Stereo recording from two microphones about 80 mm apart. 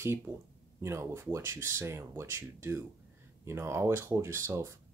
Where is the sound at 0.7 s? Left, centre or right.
Right.